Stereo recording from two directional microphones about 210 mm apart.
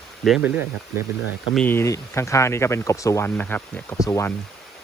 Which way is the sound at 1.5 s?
10° left (ahead or behind).